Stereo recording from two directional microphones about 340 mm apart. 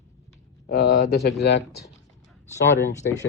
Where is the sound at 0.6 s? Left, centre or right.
Left.